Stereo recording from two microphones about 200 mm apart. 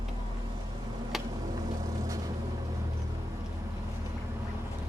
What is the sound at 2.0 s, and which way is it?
Vehicle, 15° right (ahead or behind).